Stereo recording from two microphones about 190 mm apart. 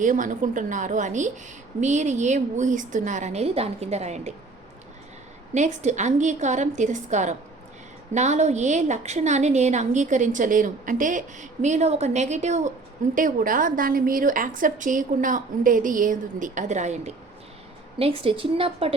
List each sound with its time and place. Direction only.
0.0 s a woman's voice: 45° right (ahead or behind)
5.5 s a woman's voice: 40° right (ahead or behind)